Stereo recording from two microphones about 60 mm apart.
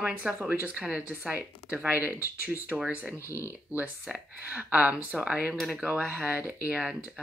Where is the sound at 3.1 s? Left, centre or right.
Left.